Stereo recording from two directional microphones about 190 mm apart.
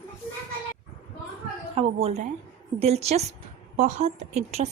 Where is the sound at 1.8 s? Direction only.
30° right (ahead or behind).